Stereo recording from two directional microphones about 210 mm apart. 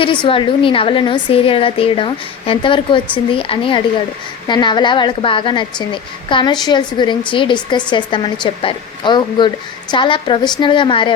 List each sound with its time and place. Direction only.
0.0 s a woman's voice: 25° left (ahead or behind)